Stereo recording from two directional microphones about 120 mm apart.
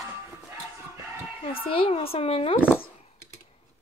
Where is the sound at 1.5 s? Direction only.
50° left (ahead or behind).